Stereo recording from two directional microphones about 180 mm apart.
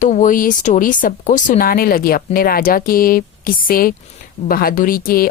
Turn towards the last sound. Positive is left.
turn(degrees=55)  # may be behind; listen again after turning